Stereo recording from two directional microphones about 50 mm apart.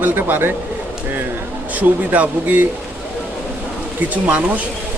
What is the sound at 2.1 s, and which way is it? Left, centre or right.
Speech, right.